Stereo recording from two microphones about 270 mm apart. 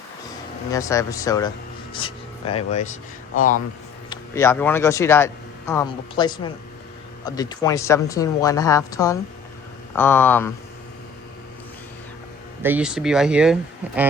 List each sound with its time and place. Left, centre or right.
0.7 s speech: centre; by 3.6 s left
4.1 s speech: centre
12.6 s speech: centre